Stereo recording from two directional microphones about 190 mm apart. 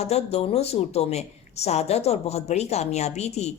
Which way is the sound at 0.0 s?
35° left (ahead or behind).